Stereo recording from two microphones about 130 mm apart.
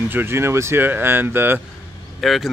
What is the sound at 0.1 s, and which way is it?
Speech, 15° right (ahead or behind).